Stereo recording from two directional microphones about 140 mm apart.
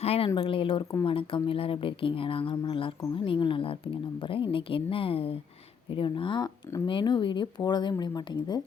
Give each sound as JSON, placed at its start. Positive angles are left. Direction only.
{"t": 0.0, "sound": "speech", "side_deg": 45}